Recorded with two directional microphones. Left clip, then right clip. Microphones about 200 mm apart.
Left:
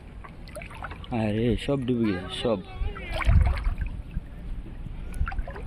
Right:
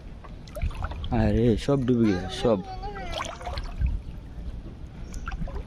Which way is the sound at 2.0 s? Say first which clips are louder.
Right 3 dB; 55° right (ahead or behind).